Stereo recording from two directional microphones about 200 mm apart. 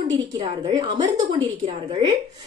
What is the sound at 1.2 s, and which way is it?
Speech, 30° right (ahead or behind).